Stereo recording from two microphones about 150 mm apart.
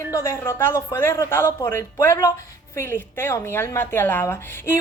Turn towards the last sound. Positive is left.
turn(degrees=15)  # may be behind; listen again after turning